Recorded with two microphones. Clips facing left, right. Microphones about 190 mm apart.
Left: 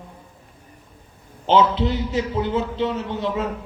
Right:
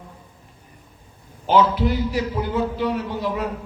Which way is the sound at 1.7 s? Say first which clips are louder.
Even; 25° left (ahead or behind).